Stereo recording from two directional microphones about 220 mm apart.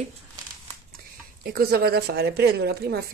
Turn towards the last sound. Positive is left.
turn(degrees=-45)  # may be behind; listen again after turning